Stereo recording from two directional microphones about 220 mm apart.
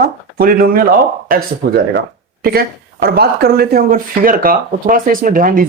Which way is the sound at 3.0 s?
45° right (ahead or behind).